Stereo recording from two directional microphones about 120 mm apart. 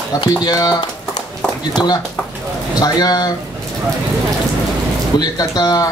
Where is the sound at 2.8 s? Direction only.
35° left (ahead or behind).